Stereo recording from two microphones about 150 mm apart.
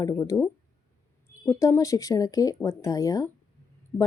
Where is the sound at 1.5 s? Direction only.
20° left (ahead or behind).